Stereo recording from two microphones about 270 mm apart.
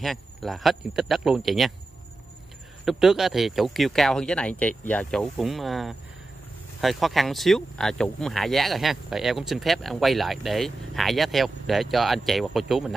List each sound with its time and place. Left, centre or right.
0.0 s speech: centre
2.8 s speech: centre